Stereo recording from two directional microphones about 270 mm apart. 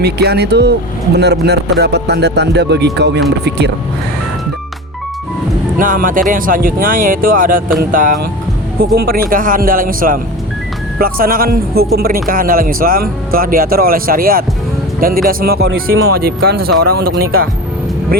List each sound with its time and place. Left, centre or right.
0.0 s speech: right
5.8 s speech: right